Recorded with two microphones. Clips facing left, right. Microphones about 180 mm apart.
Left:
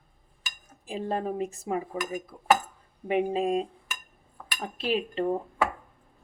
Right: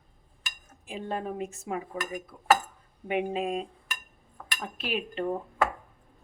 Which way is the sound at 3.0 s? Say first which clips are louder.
Left 3 dB; 35° left (ahead or behind).